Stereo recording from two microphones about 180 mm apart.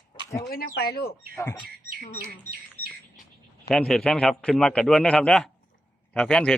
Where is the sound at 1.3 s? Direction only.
15° left (ahead or behind).